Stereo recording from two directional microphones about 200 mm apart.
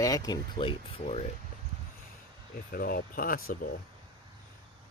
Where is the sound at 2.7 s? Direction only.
50° left (ahead or behind).